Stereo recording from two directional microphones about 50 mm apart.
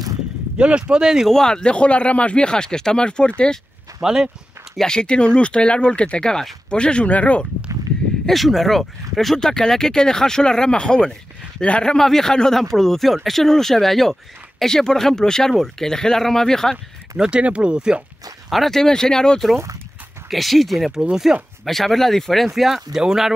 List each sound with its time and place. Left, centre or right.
0.6 s speech: right
1.3 s speech: centre
4.0 s speech: centre
4.7 s speech: centre
8.3 s speech: centre
17.2 s speech: right
18.5 s speech: centre
20.2 s speech: centre
21.6 s speech: centre
22.5 s speech: centre